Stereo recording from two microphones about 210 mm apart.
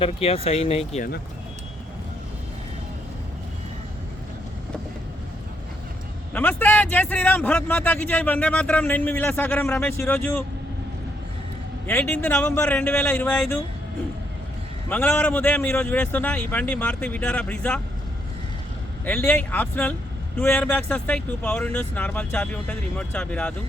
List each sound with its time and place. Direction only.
0.0 s speech: 25° left (ahead or behind)
6.3 s a man's voice: 10° left (ahead or behind)
11.9 s a man's voice: 10° left (ahead or behind)
14.8 s a man's voice: 5° left (ahead or behind)
19.0 s a man's voice: 10° left (ahead or behind)